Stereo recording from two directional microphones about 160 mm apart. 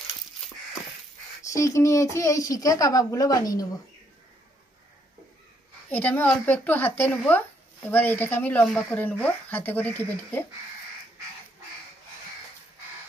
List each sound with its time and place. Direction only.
1.4 s speech: 20° left (ahead or behind)
5.9 s speech: 10° left (ahead or behind)